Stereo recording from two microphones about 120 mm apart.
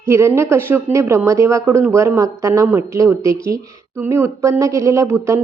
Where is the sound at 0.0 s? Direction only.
25° right (ahead or behind).